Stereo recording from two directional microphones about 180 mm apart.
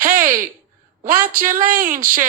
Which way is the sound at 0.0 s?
50° right (ahead or behind).